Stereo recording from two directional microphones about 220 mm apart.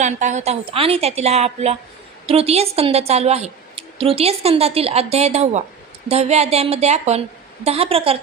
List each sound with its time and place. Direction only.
0.0 s a woman's voice: 35° right (ahead or behind)